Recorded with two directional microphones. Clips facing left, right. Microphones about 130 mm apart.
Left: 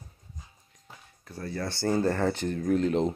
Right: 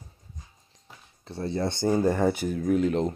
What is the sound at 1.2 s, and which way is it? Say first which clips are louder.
Speech: right 5 dB; 25° right (ahead or behind).